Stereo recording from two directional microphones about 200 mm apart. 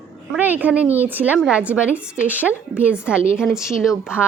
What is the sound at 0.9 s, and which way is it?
A woman's voice, 10° right (ahead or behind).